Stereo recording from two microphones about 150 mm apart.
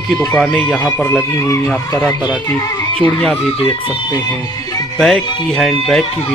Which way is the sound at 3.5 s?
35° left (ahead or behind).